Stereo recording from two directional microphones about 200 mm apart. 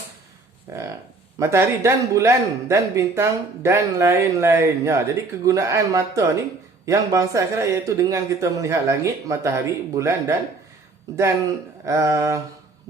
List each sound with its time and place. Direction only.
0.7 s speech: 15° right (ahead or behind)
11.9 s speech: 15° right (ahead or behind)